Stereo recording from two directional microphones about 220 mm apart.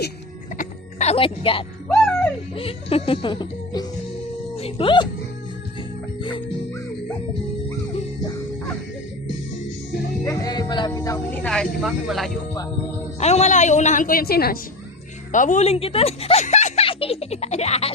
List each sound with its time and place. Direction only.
0.5 s music: 35° left (ahead or behind)
1.9 s music: 5° left (ahead or behind)
2.6 s music: 25° left (ahead or behind)
4.5 s speech: 25° left (ahead or behind)
10.2 s speech: 15° left (ahead or behind); by 12.3 s centre (ahead or behind)
13.1 s a woman's voice: 30° left (ahead or behind)